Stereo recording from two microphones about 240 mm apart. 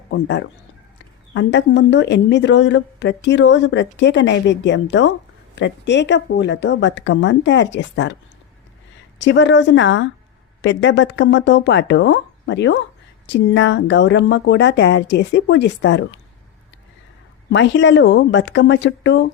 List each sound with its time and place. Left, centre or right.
0.1 s a woman's voice: left
9.2 s a woman's voice: left
17.5 s a woman's voice: left